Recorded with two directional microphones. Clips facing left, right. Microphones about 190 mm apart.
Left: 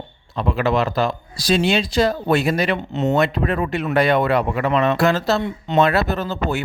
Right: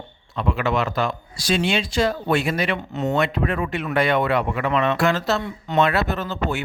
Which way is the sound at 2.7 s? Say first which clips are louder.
Left 4 dB; 25° left (ahead or behind).